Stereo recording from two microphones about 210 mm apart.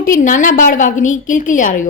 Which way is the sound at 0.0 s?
40° left (ahead or behind).